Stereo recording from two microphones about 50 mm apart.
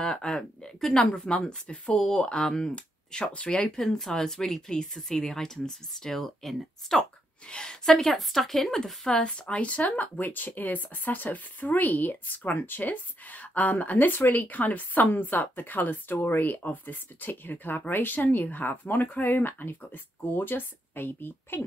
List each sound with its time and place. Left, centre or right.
0.0 s speech: centre
9.1 s speech: centre; by 21.6 s left